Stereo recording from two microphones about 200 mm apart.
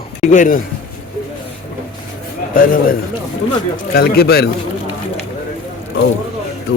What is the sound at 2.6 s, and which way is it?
A man's voice, 45° left (ahead or behind).